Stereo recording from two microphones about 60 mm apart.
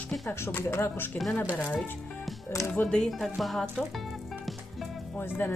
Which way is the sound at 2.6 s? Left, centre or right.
Left.